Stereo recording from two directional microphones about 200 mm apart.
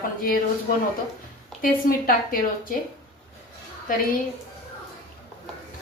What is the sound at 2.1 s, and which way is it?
Speech, 45° left (ahead or behind).